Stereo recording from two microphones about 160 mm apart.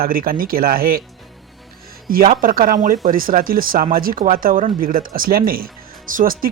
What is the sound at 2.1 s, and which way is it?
Speech, 65° right (ahead or behind).